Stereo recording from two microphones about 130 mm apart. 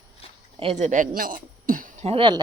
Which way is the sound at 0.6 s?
60° right (ahead or behind).